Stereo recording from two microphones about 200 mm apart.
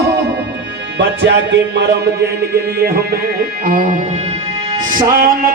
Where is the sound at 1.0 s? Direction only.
65° right (ahead or behind).